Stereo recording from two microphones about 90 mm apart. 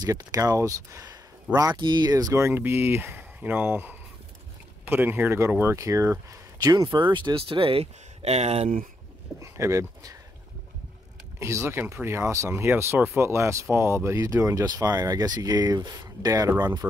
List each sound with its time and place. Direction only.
0.0 s speech: 40° right (ahead or behind)
1.5 s speech: 50° right (ahead or behind)
2.5 s speech: 25° right (ahead or behind)
5.8 s speech: 35° right (ahead or behind)
6.6 s speech: 50° right (ahead or behind); by 7.8 s 75° right (ahead or behind)
9.4 s speech: 35° right (ahead or behind)
11.3 s speech: 35° right (ahead or behind)